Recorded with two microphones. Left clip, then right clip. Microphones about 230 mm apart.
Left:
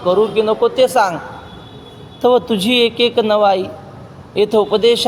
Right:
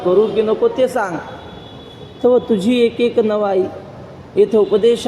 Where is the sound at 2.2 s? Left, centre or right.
Left.